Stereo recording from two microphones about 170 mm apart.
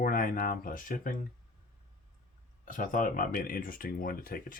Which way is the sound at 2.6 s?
50° left (ahead or behind).